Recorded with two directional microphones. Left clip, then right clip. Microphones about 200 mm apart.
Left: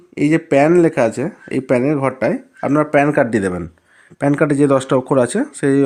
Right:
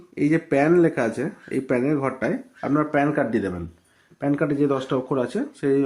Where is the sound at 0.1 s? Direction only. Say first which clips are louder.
Left 7 dB; 40° left (ahead or behind).